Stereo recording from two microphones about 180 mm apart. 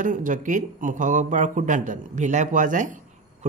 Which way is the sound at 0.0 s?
45° right (ahead or behind).